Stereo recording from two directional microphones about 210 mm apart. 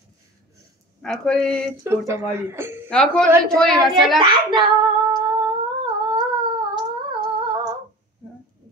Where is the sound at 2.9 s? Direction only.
5° left (ahead or behind).